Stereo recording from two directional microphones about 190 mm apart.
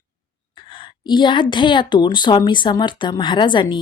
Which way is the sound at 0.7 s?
25° left (ahead or behind).